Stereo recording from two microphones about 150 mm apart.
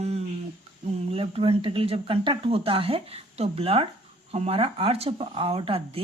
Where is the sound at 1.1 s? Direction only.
40° right (ahead or behind).